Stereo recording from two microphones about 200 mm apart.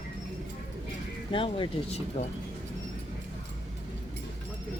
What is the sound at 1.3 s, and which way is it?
Speech, 25° left (ahead or behind).